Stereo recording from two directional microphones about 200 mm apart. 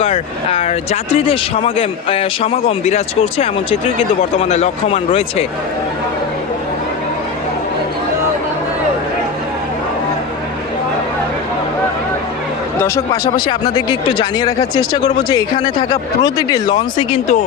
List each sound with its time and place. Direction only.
0.0 s speech: 30° left (ahead or behind)
12.8 s speech: 20° left (ahead or behind)